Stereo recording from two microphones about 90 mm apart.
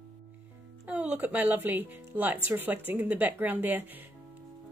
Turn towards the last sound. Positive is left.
turn(degrees=-20)  # may be behind; listen again after turning